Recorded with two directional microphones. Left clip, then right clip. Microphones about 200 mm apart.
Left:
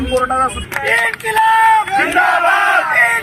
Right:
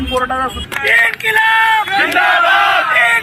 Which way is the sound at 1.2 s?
15° left (ahead or behind).